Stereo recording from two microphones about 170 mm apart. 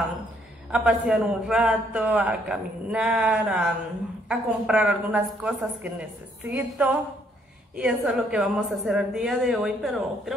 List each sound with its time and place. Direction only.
0.7 s a man's voice: 5° right (ahead or behind)